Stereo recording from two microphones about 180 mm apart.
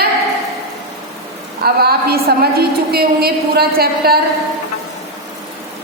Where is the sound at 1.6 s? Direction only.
60° right (ahead or behind).